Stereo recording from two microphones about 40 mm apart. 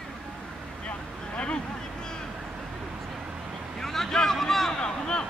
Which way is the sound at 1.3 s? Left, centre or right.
Left.